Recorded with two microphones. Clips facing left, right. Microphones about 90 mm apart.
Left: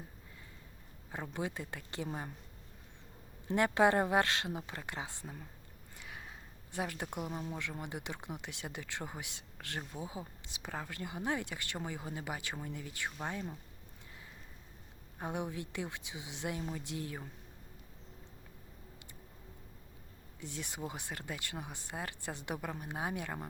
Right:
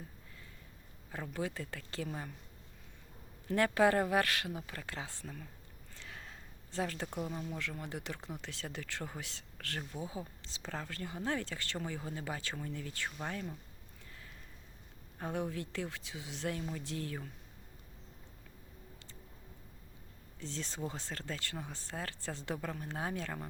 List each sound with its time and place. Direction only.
1.1 s speech: 20° left (ahead or behind)
3.4 s speech: 20° left (ahead or behind)
15.2 s speech: 20° left (ahead or behind)
20.4 s speech: 15° left (ahead or behind)